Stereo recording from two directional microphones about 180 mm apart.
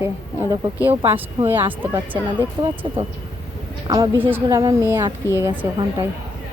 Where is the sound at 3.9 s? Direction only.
20° right (ahead or behind).